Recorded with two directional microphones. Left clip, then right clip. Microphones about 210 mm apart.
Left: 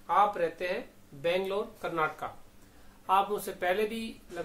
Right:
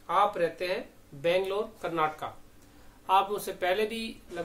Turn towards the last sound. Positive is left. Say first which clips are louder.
# right 2 dB
turn(degrees=-5)  # may be behind; listen again after turning